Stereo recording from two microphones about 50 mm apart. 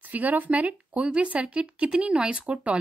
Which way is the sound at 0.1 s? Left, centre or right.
Right.